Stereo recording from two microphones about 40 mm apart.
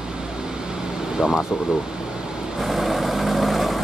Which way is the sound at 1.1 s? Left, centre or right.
Centre.